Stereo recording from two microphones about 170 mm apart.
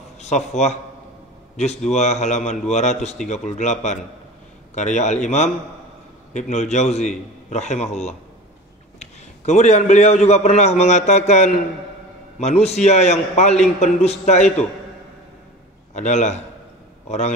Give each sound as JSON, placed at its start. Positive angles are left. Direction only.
{"t": 0.2, "sound": "a man's voice", "side_deg": 40}
{"t": 1.9, "sound": "a man's voice", "side_deg": 40}
{"t": 15.9, "sound": "a man's voice", "side_deg": 45}